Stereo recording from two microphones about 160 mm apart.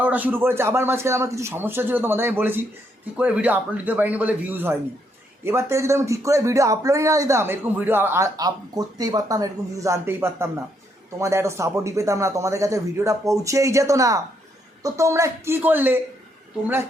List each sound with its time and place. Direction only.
0.0 s a man's voice: 10° right (ahead or behind)